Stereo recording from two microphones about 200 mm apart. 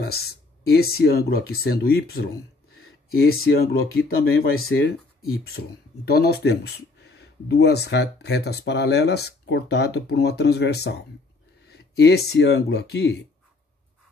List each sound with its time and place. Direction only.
0.0 s speech: 50° left (ahead or behind)